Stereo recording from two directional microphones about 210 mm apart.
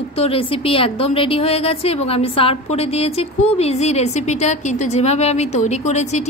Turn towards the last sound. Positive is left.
turn(degrees=30)  # may be behind; listen again after turning